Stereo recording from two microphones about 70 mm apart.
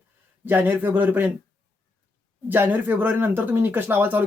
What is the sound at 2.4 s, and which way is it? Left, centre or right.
Speech, right.